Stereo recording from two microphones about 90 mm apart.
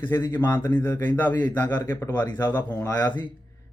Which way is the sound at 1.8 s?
35° left (ahead or behind).